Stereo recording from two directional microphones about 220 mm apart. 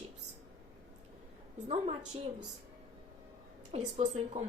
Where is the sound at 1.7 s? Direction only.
30° right (ahead or behind).